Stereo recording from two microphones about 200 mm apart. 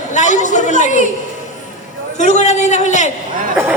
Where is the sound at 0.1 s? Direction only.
40° left (ahead or behind).